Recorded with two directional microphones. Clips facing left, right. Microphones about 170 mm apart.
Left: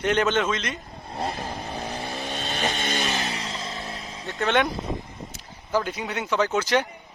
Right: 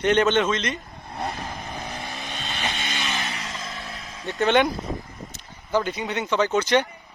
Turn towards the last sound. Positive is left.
turn(degrees=5)  # may be behind; listen again after turning